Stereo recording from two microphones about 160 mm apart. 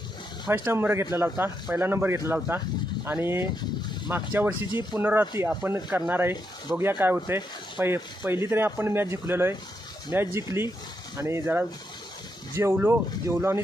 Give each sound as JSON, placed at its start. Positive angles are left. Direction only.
{"t": 0.5, "sound": "speech", "side_deg": -15}